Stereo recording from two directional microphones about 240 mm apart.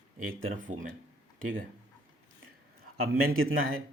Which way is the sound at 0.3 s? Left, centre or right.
Right.